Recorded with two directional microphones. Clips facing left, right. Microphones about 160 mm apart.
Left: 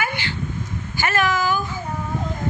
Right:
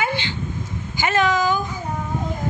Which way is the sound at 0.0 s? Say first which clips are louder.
Right 3 dB; 20° right (ahead or behind).